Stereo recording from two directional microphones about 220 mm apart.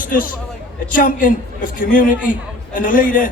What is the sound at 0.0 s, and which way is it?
A man's voice, 40° left (ahead or behind).